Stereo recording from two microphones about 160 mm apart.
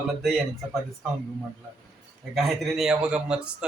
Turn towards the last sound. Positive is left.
turn(degrees=-5)  # may be behind; listen again after turning